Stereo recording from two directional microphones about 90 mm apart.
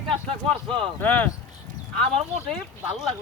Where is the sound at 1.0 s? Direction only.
20° left (ahead or behind).